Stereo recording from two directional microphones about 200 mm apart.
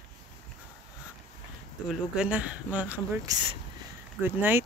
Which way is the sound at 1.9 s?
5° right (ahead or behind).